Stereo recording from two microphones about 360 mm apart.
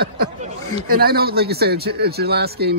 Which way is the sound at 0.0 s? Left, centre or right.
Right.